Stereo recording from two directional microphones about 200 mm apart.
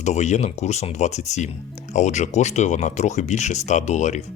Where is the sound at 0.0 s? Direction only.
35° left (ahead or behind).